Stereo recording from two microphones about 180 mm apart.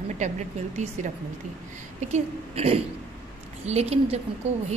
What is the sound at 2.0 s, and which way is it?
A woman's voice, 35° right (ahead or behind).